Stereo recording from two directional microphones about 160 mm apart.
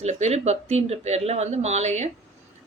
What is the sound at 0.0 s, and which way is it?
Speech, 45° right (ahead or behind).